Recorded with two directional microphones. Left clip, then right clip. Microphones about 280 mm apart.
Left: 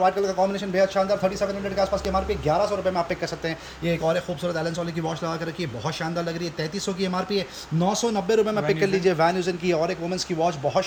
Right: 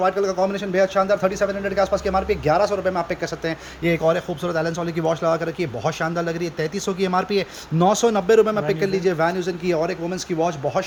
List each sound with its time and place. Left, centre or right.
0.0 s a man's voice: centre